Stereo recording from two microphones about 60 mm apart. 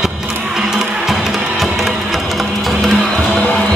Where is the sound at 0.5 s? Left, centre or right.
Centre.